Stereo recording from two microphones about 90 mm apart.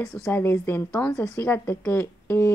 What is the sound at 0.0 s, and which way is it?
Speech, 35° left (ahead or behind).